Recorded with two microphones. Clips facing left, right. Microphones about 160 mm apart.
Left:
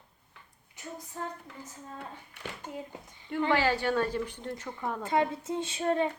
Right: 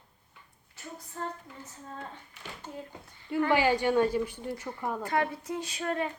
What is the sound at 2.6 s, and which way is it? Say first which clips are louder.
Speech: right 1 dB; 15° left (ahead or behind).